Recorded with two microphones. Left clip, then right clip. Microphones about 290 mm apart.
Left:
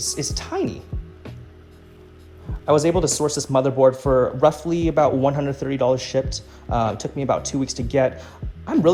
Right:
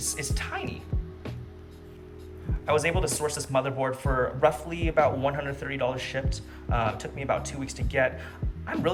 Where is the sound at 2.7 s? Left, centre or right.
Centre.